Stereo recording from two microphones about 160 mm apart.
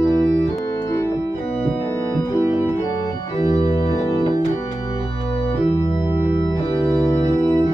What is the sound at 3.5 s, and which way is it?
Organ, 35° left (ahead or behind).